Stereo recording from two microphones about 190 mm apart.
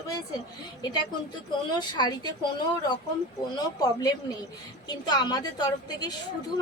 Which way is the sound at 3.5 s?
20° left (ahead or behind).